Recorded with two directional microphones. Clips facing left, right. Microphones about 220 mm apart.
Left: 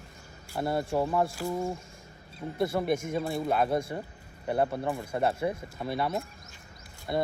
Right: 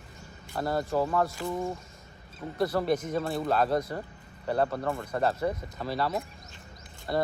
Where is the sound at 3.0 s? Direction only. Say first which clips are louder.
Even; 10° left (ahead or behind).